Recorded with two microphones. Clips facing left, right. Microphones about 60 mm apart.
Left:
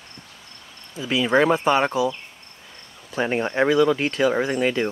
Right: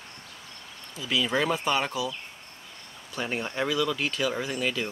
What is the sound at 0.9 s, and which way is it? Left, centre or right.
Speech, left.